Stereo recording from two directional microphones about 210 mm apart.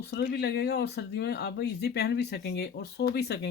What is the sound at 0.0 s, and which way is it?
Speech, 50° left (ahead or behind).